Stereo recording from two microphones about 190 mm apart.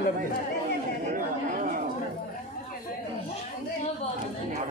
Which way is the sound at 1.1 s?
45° right (ahead or behind).